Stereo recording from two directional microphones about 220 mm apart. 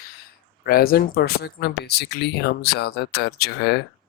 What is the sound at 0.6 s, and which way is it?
Speech, 45° left (ahead or behind).